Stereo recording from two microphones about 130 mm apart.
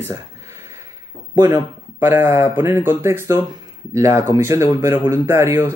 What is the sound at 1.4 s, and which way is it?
Speech, 20° right (ahead or behind).